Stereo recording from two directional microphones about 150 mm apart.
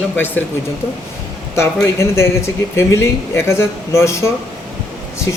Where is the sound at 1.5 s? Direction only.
15° left (ahead or behind).